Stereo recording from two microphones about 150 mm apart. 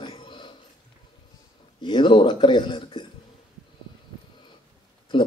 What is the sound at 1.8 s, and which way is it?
Speech, 30° left (ahead or behind).